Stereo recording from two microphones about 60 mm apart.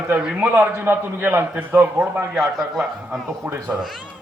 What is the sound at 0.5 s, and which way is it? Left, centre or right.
Speech, right.